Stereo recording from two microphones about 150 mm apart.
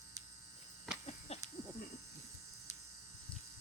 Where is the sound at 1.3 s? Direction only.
45° left (ahead or behind).